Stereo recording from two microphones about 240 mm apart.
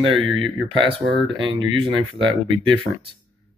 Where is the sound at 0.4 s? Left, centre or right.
Right.